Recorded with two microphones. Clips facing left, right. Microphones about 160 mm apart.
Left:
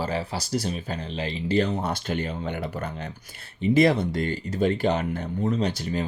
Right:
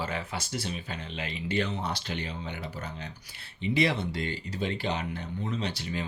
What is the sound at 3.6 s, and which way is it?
Speech, 45° left (ahead or behind).